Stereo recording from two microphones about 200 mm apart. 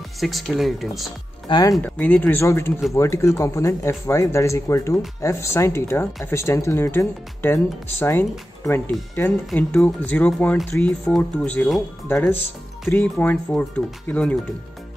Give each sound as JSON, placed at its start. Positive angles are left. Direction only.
{"t": 0.2, "sound": "speech", "side_deg": 0}
{"t": 1.5, "sound": "speech", "side_deg": 20}
{"t": 1.8, "sound": "speech", "side_deg": 5}